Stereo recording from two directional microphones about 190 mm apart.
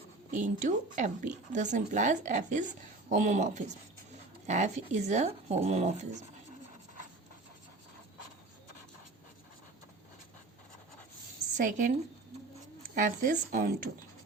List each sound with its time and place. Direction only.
0.3 s speech: 40° right (ahead or behind)
11.5 s speech: 45° right (ahead or behind)